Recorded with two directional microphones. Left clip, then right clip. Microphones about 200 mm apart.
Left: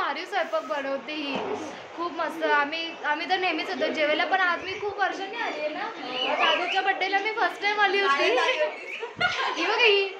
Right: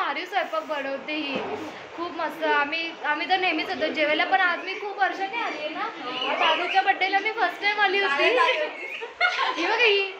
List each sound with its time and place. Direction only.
0.0 s a woman's voice: 10° left (ahead or behind)
6.7 s a woman's voice: 15° left (ahead or behind)
9.7 s a woman's voice: 15° left (ahead or behind)